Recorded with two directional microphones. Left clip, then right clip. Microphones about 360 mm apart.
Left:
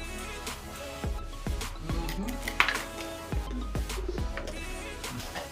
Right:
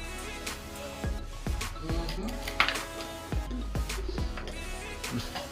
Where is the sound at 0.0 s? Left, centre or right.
Centre.